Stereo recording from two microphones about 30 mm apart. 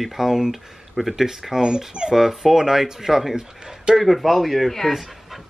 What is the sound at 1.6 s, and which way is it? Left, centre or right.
Speech, right.